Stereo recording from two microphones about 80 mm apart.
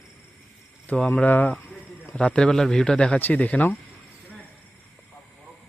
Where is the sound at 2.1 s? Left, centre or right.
Centre.